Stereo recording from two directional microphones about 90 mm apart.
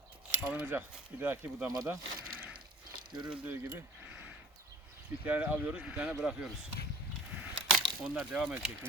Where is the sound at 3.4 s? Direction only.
25° right (ahead or behind).